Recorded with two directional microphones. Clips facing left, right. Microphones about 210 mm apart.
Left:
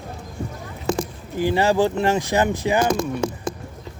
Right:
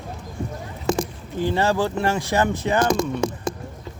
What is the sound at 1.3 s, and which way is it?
Speech, 10° left (ahead or behind).